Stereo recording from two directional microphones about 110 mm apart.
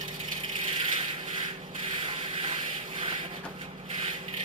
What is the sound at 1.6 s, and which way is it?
Sanding, 45° right (ahead or behind).